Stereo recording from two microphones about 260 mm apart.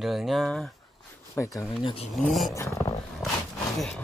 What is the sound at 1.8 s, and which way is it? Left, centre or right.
Speech, left.